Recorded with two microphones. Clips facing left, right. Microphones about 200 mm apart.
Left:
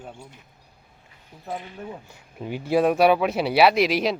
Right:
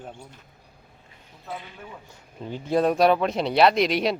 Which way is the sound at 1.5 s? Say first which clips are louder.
Left 4 dB; 35° left (ahead or behind).